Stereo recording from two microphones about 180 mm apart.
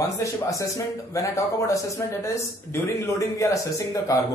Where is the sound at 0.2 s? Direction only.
20° left (ahead or behind).